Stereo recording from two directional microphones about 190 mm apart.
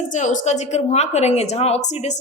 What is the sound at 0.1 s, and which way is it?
A woman's voice, 40° left (ahead or behind).